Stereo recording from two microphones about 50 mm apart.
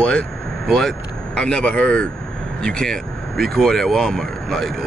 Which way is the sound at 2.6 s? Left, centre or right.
Centre.